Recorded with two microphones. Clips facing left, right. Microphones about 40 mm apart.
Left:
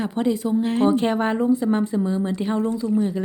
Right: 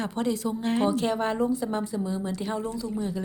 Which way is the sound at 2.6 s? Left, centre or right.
Left.